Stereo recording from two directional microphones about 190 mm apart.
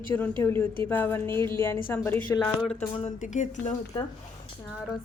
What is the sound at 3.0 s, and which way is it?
Speech, 40° left (ahead or behind).